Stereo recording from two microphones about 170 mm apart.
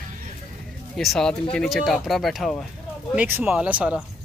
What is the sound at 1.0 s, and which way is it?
Speech, centre (ahead or behind).